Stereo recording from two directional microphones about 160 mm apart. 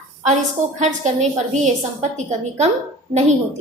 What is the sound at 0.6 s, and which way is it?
A woman's voice, 50° right (ahead or behind).